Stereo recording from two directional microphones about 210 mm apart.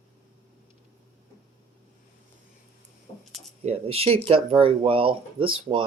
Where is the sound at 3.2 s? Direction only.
Centre (ahead or behind).